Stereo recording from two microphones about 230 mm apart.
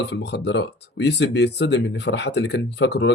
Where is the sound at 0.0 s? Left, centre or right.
Left.